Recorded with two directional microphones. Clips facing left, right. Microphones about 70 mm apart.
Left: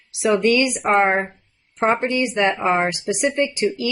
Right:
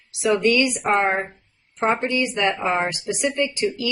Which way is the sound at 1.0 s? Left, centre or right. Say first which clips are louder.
Left 3 dB; left.